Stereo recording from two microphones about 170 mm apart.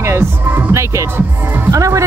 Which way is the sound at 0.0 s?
15° right (ahead or behind).